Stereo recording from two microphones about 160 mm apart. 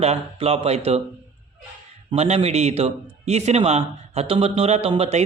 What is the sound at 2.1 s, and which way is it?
A man's voice, 40° right (ahead or behind).